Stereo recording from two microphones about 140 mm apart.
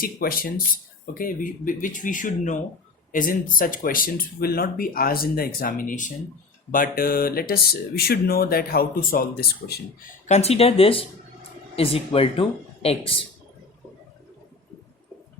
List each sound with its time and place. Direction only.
0.0 s speech: 90° left
1.2 s speech: 75° left (ahead or behind)
3.1 s speech: 80° left
6.7 s speech: 85° left
10.2 s speech: 50° left (ahead or behind)